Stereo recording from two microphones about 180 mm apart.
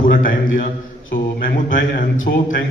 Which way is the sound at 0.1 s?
50° left (ahead or behind).